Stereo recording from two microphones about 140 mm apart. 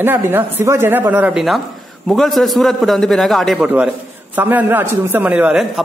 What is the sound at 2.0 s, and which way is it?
A man's voice, centre (ahead or behind).